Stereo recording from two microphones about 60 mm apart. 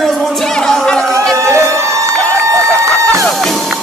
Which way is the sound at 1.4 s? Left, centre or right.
Right.